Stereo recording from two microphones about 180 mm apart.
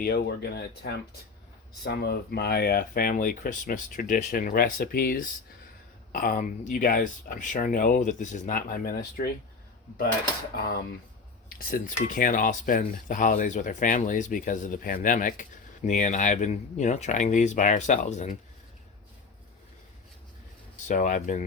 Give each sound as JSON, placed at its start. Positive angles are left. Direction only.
{"t": 0.0, "sound": "speech", "side_deg": 60}
{"t": 10.5, "sound": "speech", "side_deg": 55}
{"t": 20.8, "sound": "speech", "side_deg": 45}